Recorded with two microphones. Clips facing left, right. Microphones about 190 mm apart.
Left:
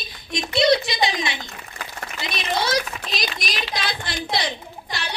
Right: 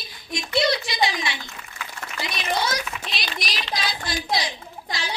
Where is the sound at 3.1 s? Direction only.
45° left (ahead or behind).